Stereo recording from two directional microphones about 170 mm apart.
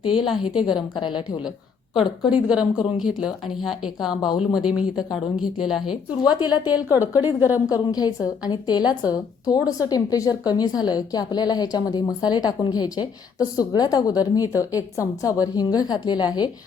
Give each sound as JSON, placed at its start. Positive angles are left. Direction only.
{"t": 0.0, "sound": "a woman's voice", "side_deg": 25}
{"t": 2.5, "sound": "speech", "side_deg": -5}
{"t": 4.2, "sound": "a woman's voice", "side_deg": 25}
{"t": 4.5, "sound": "speech", "side_deg": -5}
{"t": 6.3, "sound": "a woman's voice", "side_deg": 25}
{"t": 7.2, "sound": "a woman's voice", "side_deg": -10}
{"t": 7.7, "sound": "a woman's voice", "side_deg": 20}